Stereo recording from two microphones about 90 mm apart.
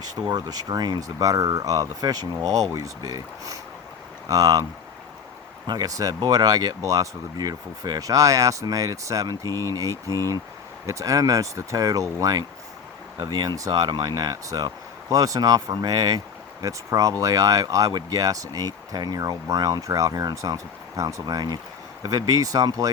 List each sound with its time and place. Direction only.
0.0 s speech: 45° right (ahead or behind)
5.6 s speech: 45° right (ahead or behind)